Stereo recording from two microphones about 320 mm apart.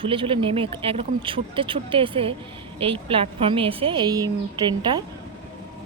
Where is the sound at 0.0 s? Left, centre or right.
Centre.